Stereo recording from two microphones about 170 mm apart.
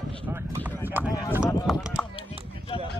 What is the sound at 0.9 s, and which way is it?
Speech, 10° right (ahead or behind).